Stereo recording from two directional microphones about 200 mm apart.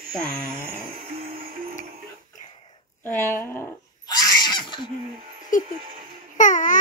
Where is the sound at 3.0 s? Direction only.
10° left (ahead or behind).